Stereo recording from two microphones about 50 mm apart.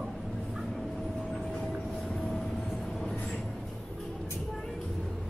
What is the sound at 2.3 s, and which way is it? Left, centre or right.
Vehicle, centre.